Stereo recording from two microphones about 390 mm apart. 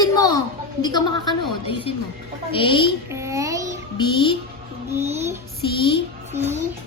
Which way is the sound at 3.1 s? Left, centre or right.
Centre.